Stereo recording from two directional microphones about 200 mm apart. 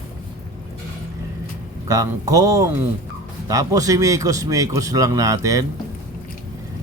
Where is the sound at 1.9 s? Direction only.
15° right (ahead or behind).